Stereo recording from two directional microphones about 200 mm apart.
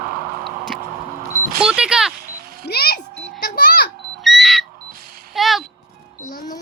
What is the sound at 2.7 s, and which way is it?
Speech, 50° left (ahead or behind).